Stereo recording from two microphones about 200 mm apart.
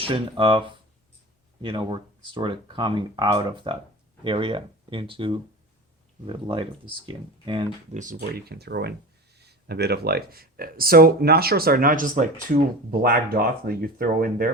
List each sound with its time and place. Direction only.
0.0 s speech: 25° right (ahead or behind)
7.9 s speech: 45° right (ahead or behind)